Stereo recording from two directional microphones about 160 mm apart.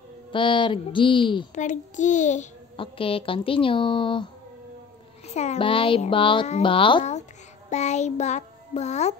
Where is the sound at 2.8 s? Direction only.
35° left (ahead or behind).